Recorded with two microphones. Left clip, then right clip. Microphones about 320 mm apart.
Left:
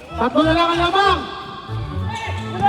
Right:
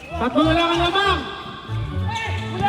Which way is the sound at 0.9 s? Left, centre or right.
Centre.